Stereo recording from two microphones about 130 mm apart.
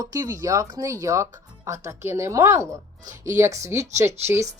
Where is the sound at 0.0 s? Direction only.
30° right (ahead or behind).